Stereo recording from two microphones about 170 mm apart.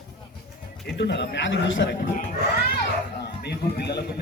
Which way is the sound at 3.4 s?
75° left (ahead or behind).